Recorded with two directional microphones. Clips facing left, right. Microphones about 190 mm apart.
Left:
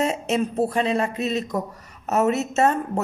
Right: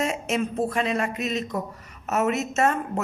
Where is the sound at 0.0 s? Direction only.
30° left (ahead or behind).